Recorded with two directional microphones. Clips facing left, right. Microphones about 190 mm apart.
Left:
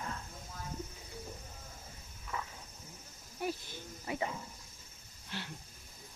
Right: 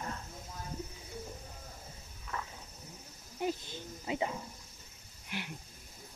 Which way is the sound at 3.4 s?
20° right (ahead or behind).